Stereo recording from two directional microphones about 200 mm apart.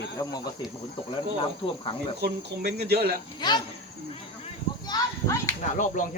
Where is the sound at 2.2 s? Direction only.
55° right (ahead or behind).